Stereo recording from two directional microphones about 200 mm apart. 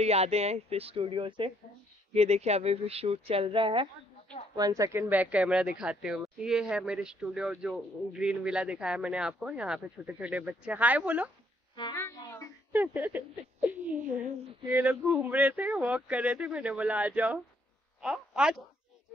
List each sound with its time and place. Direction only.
0.0 s speech: 30° right (ahead or behind); by 11.2 s 5° right (ahead or behind)
11.7 s a woman's voice: 20° left (ahead or behind)
12.0 s a sound: 15° left (ahead or behind)
12.7 s speech: 10° right (ahead or behind)